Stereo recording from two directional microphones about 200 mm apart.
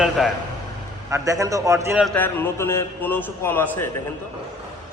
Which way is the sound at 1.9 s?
5° left (ahead or behind).